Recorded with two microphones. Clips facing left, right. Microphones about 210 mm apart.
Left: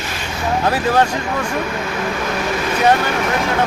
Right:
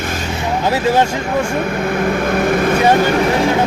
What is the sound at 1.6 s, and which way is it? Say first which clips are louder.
Speech: right 5 dB; 50° right (ahead or behind).